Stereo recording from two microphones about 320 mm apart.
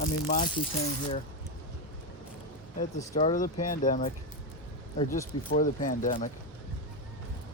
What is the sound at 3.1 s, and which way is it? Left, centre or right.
Speech, left.